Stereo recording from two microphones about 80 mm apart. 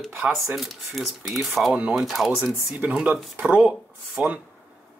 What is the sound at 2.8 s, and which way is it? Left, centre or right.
Speech, centre.